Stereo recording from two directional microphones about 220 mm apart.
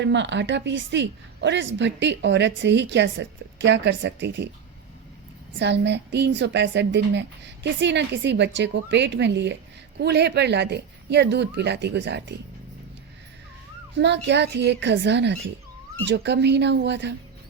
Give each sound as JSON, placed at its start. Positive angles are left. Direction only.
{"t": 0.0, "sound": "a woman's voice", "side_deg": -55}
{"t": 5.5, "sound": "a woman's voice", "side_deg": -50}
{"t": 13.9, "sound": "a woman's voice", "side_deg": -50}